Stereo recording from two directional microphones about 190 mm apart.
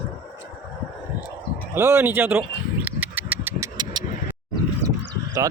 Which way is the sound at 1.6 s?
10° right (ahead or behind).